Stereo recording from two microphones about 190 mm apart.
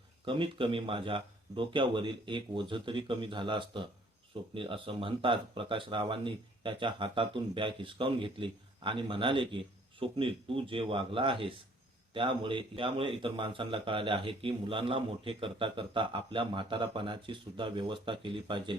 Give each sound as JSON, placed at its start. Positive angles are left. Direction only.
{"t": 0.3, "sound": "a man's voice", "side_deg": -25}